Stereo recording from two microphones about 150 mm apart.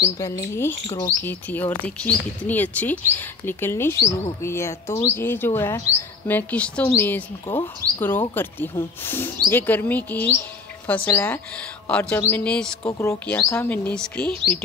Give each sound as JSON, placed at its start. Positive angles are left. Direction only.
{"t": 0.0, "sound": "speech", "side_deg": 20}
{"t": 1.2, "sound": "speech", "side_deg": 10}
{"t": 12.9, "sound": "speech", "side_deg": 20}